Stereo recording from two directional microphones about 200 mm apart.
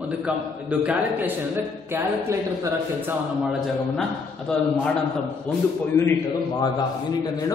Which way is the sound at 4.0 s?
5° left (ahead or behind).